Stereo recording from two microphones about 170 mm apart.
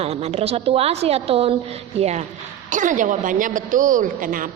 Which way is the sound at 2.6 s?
50° right (ahead or behind).